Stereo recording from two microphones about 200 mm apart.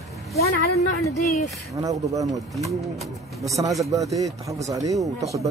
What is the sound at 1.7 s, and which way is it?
Speech, 15° right (ahead or behind).